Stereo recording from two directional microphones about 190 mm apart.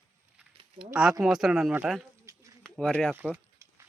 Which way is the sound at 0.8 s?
5° right (ahead or behind).